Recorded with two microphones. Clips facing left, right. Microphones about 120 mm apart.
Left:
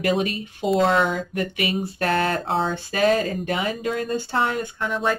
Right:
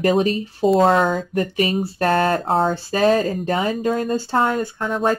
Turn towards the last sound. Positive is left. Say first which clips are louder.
# right 4 dB
turn(degrees=-40)  # may be behind; listen again after turning